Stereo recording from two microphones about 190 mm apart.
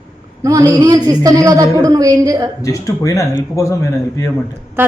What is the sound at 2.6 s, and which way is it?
Speech, 15° left (ahead or behind).